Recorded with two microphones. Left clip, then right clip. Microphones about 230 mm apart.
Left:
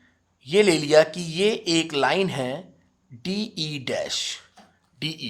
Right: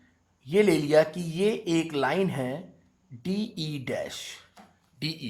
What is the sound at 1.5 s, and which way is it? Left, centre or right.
Speech, left.